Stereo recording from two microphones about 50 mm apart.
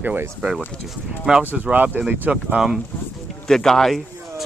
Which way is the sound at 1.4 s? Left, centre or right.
Right.